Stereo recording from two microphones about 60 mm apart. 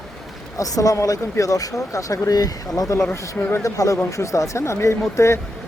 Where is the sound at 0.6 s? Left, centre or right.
Left.